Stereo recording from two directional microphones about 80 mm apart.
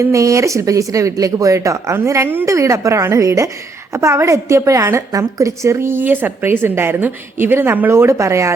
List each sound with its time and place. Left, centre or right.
0.0 s a woman's voice: right